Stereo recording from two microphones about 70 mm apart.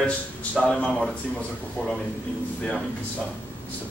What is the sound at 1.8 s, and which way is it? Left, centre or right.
Speech, centre.